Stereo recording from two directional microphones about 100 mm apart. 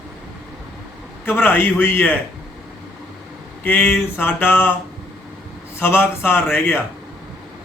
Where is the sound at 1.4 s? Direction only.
20° left (ahead or behind).